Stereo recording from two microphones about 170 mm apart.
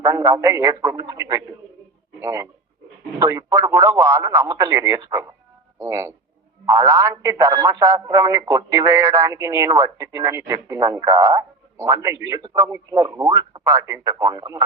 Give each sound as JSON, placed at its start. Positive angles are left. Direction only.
{"t": 0.0, "sound": "speech", "side_deg": -20}